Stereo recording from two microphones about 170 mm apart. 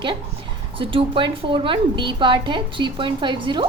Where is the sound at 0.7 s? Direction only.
30° right (ahead or behind).